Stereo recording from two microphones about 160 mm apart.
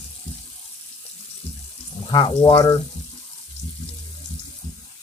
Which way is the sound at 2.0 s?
30° left (ahead or behind).